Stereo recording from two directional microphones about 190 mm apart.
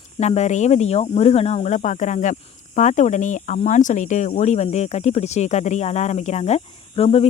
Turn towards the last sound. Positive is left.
turn(degrees=35)  # may be behind; listen again after turning